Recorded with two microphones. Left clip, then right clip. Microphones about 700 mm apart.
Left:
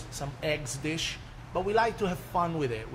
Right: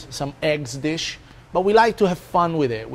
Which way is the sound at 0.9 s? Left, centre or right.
Right.